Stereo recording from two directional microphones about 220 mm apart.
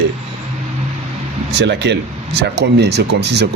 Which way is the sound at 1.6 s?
50° right (ahead or behind).